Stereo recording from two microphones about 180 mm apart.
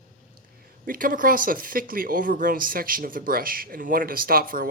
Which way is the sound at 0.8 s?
50° right (ahead or behind).